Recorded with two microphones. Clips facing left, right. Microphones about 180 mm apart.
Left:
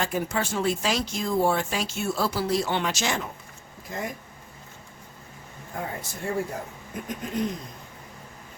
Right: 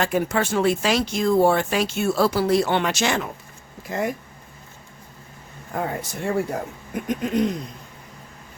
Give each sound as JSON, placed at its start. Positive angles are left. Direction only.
{"t": 0.0, "sound": "speech", "side_deg": -70}
{"t": 5.7, "sound": "speech", "side_deg": -70}